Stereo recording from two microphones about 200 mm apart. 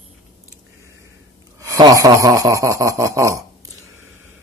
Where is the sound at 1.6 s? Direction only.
15° right (ahead or behind).